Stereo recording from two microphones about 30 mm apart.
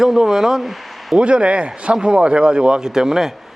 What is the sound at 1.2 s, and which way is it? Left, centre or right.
Speech, right.